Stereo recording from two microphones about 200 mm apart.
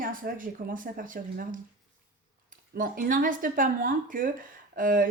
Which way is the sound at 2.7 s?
45° right (ahead or behind).